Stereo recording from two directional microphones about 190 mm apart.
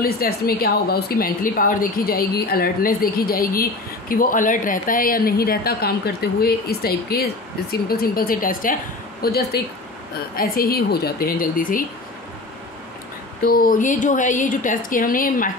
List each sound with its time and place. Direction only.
0.0 s a woman's voice: 50° left (ahead or behind)
13.5 s a woman's voice: 50° left (ahead or behind)